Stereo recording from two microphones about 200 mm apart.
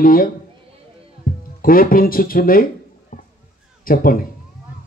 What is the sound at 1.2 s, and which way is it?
Music, 45° left (ahead or behind).